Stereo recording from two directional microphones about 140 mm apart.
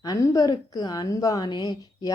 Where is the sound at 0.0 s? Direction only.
25° left (ahead or behind).